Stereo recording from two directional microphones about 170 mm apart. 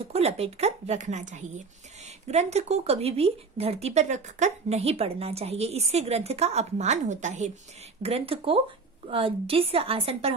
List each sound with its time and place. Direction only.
0.1 s speech: 35° right (ahead or behind)